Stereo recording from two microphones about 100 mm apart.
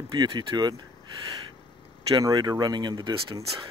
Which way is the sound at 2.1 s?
45° right (ahead or behind).